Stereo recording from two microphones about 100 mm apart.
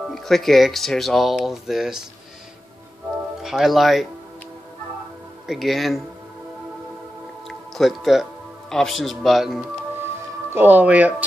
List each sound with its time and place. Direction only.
0.1 s speech: 5° left (ahead or behind)
3.4 s speech: centre (ahead or behind)
5.5 s speech: centre (ahead or behind)
7.4 s speech: centre (ahead or behind)
10.5 s speech: 20° right (ahead or behind)